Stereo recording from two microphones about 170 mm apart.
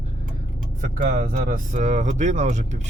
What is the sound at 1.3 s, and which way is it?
Speech, 45° right (ahead or behind).